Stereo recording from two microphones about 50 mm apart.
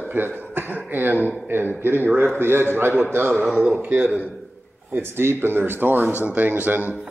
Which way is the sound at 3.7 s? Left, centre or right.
Right.